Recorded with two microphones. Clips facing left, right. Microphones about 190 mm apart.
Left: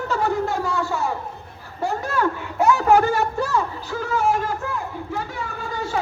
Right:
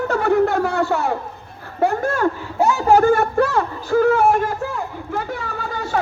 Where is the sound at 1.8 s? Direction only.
50° right (ahead or behind).